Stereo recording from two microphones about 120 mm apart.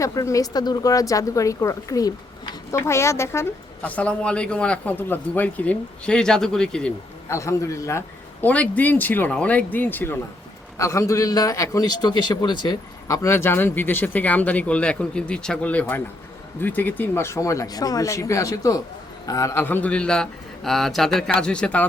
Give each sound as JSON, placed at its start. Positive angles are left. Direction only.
{"t": 0.0, "sound": "a man's voice", "side_deg": 25}
{"t": 3.8, "sound": "a man's voice", "side_deg": 10}
{"t": 7.3, "sound": "a man's voice", "side_deg": 25}